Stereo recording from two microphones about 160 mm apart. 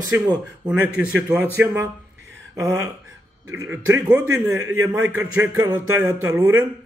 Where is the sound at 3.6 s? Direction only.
20° right (ahead or behind).